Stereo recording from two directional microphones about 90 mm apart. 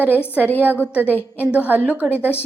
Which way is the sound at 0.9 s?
20° right (ahead or behind).